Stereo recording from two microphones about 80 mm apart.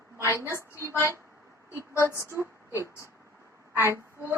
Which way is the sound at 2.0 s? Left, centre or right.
Right.